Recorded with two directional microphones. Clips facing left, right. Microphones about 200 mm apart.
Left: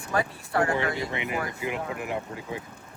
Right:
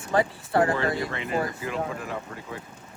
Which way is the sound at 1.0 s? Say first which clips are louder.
Right 2 dB; 15° left (ahead or behind).